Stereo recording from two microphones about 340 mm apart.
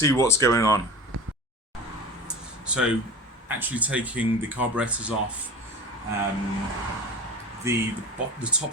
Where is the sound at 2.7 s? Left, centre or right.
Centre.